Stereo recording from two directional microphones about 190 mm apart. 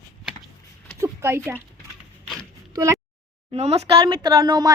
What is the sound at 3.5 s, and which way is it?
A woman's voice, 30° right (ahead or behind).